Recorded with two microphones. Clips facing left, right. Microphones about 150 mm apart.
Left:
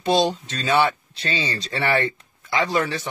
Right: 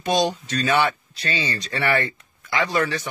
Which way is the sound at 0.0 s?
25° left (ahead or behind).